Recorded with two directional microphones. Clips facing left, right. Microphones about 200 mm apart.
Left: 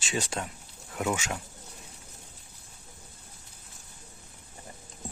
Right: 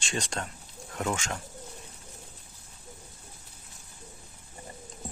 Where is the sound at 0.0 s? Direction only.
5° left (ahead or behind).